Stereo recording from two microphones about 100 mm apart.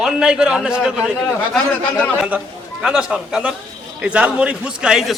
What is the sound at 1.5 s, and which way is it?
Speech, 10° left (ahead or behind).